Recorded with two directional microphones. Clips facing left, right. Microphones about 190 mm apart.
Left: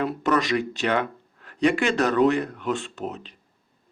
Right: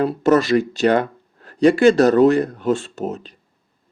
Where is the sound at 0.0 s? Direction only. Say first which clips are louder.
Right 7 dB; 35° right (ahead or behind).